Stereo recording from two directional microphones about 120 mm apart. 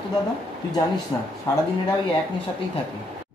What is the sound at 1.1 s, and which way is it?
Speech, 30° left (ahead or behind).